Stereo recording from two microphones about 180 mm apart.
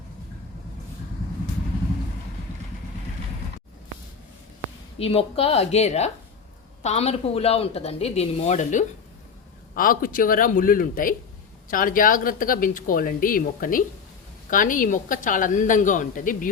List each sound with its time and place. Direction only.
4.9 s speech: 35° left (ahead or behind)